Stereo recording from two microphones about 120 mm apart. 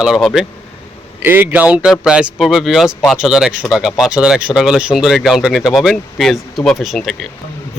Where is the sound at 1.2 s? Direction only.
15° right (ahead or behind).